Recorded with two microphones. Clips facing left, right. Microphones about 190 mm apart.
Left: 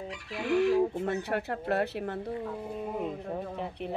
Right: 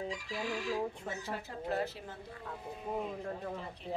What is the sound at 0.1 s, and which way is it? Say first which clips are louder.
Speech: left 8 dB; 60° left (ahead or behind).